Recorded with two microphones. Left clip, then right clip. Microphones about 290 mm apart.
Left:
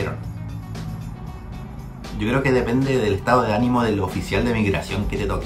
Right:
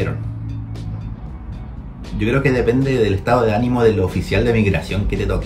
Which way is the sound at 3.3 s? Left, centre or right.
Centre.